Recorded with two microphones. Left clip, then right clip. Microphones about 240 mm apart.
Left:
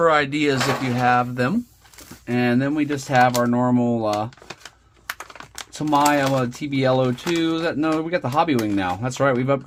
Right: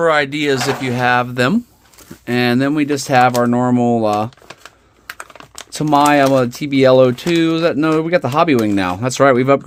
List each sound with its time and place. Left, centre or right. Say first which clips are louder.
0.0 s speech: right 3 dB; right
5.0 s typing: right 1 dB; centre
5.7 s speech: right 6 dB; right